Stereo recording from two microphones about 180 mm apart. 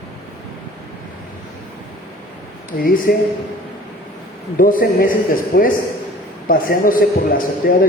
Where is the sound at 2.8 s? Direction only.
50° left (ahead or behind).